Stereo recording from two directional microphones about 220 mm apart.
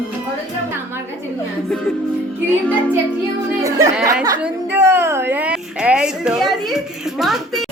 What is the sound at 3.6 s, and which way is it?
A woman's voice, 15° right (ahead or behind).